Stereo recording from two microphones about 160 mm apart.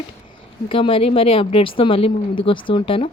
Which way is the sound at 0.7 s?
35° left (ahead or behind).